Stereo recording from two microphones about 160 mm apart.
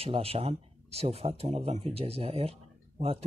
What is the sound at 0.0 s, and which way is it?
Speech, 35° right (ahead or behind).